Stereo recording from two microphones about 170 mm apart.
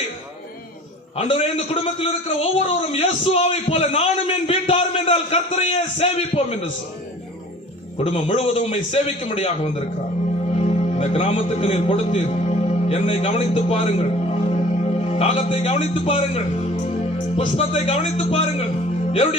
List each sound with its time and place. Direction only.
1.1 s a man's voice: 35° left (ahead or behind)
7.9 s a man's voice: 35° left (ahead or behind)